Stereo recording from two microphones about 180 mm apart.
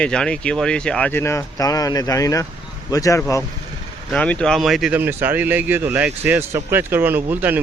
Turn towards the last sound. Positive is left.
turn(degrees=-10)  # may be behind; listen again after turning